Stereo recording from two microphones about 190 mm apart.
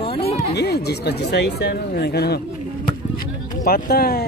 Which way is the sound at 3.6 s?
50° left (ahead or behind).